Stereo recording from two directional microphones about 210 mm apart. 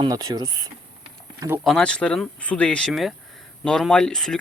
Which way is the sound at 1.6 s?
Centre (ahead or behind).